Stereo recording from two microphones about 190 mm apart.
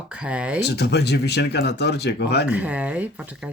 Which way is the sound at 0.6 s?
60° left (ahead or behind).